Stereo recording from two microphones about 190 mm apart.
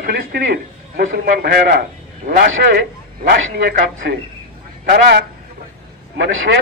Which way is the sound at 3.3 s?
55° right (ahead or behind).